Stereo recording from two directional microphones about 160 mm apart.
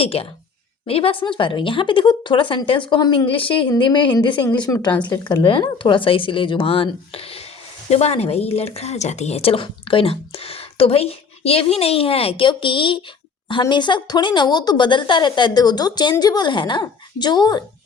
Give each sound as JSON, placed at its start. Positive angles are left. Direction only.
{"t": 0.0, "sound": "speech", "side_deg": 35}